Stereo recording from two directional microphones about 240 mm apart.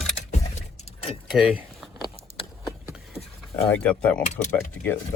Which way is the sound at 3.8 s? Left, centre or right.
Centre.